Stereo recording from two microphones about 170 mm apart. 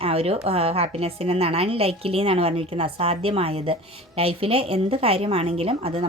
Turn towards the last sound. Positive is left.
turn(degrees=-35)  # may be behind; listen again after turning